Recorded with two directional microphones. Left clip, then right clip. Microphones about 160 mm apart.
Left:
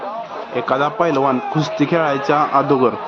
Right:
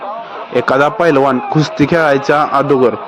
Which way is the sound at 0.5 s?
35° right (ahead or behind).